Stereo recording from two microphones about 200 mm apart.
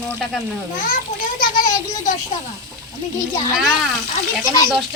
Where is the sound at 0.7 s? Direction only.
45° left (ahead or behind).